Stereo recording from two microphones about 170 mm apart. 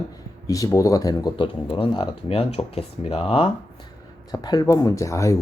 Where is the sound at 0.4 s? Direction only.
20° left (ahead or behind).